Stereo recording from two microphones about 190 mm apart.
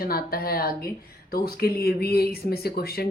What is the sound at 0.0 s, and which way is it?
Speech, 50° left (ahead or behind).